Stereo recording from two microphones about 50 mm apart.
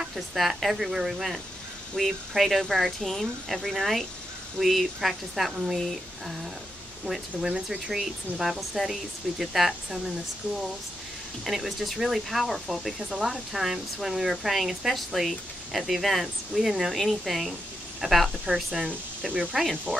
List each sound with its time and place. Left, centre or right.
0.0 s speech: centre
7.1 s speech: centre
11.4 s speech: centre
19.9 s speech: right